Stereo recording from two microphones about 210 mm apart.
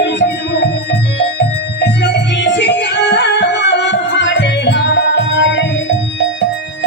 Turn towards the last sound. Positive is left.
turn(degrees=60)  # may be behind; listen again after turning